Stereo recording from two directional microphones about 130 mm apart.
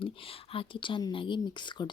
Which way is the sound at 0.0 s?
45° left (ahead or behind).